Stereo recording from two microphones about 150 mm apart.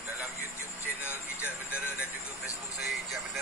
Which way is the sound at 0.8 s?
15° left (ahead or behind).